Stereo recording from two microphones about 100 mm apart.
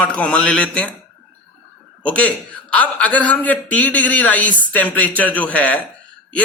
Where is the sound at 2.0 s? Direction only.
15° left (ahead or behind).